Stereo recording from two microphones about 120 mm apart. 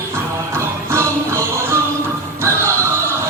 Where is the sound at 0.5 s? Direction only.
20° right (ahead or behind).